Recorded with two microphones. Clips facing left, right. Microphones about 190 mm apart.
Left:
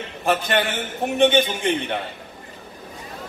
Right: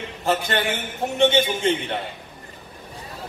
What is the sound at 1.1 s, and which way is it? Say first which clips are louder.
Speech: left 1 dB; 15° left (ahead or behind).